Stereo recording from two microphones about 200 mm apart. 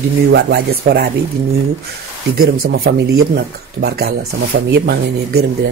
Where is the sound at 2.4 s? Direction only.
50° right (ahead or behind).